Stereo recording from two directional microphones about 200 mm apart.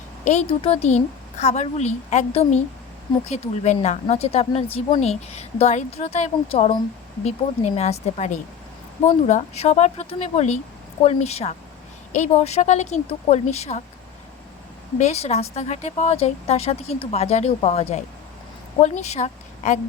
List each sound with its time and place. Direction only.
0.3 s speech: 30° left (ahead or behind)
14.9 s a woman's voice: 35° left (ahead or behind)